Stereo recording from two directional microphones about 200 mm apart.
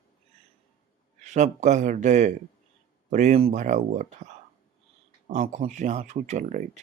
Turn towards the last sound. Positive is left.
turn(degrees=-40)  # may be behind; listen again after turning